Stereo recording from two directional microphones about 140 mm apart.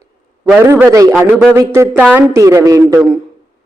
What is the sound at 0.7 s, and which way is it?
A man's voice, 20° right (ahead or behind).